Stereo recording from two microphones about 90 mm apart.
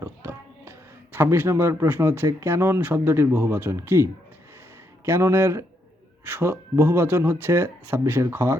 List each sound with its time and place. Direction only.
0.0 s speech: 30° right (ahead or behind)